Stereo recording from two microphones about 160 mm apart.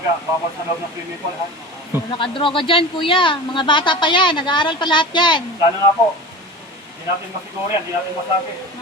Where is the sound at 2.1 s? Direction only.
30° left (ahead or behind).